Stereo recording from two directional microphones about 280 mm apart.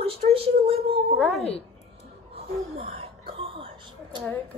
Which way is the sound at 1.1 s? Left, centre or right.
Centre.